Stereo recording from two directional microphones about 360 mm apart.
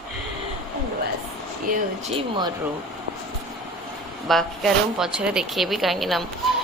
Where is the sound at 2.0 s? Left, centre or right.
Centre.